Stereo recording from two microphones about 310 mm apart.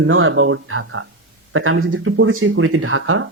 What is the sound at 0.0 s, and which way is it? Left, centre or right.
Speech, right.